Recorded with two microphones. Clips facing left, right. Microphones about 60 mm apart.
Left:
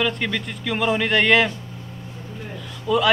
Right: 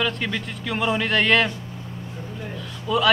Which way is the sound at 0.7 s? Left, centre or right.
Centre.